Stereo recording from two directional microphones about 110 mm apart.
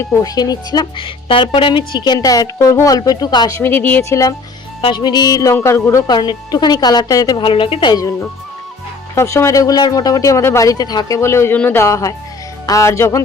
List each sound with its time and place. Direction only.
0.0 s speech: 25° left (ahead or behind)
0.3 s speech: 35° left (ahead or behind)
0.9 s speech: 55° left (ahead or behind)
2.1 s speech: 35° left (ahead or behind)
3.6 s speech: 20° left (ahead or behind)
4.8 s speech: 45° left (ahead or behind); by 6.0 s 25° left (ahead or behind)
6.1 s speech: 40° left (ahead or behind)
7.4 s speech: 50° left (ahead or behind)
9.1 s speech: 25° left (ahead or behind)
11.2 s speech: 25° left (ahead or behind)